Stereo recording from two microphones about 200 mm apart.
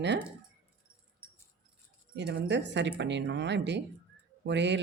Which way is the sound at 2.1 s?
60° right (ahead or behind).